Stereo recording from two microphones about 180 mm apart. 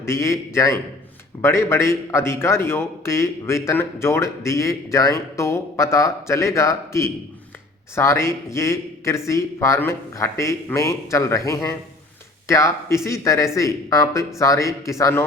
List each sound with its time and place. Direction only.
0.0 s a man's voice: 15° left (ahead or behind)